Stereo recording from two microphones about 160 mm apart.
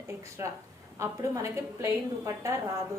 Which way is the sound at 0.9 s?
20° right (ahead or behind).